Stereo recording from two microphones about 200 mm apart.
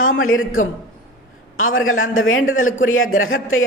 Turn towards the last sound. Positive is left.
turn(degrees=85)